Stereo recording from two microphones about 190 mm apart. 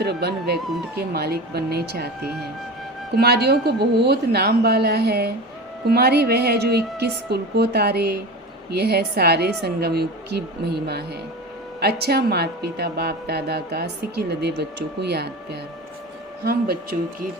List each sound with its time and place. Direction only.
0.0 s a woman's voice: 55° right (ahead or behind)
16.4 s speech: 50° right (ahead or behind)